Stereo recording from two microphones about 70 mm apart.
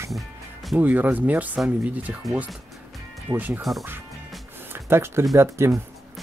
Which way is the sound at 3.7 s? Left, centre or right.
Centre.